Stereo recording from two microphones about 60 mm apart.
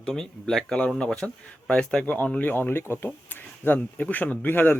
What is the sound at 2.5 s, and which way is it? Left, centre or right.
Speech, left.